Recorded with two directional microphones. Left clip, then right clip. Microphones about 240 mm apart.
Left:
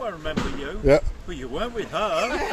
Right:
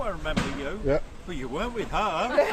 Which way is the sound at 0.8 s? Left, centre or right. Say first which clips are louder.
Left 8 dB; left.